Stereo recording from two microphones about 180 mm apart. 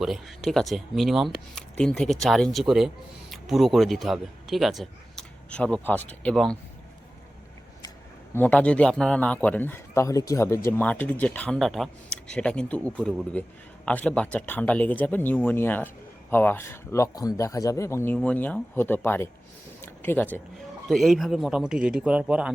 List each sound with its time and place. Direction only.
0.0 s speech: centre (ahead or behind)
8.4 s a man's voice: 5° left (ahead or behind)